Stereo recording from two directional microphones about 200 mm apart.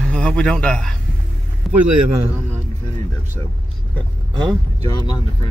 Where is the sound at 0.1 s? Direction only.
5° left (ahead or behind).